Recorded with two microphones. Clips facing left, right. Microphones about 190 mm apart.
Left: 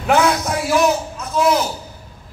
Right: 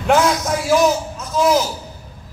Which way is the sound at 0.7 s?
60° left (ahead or behind).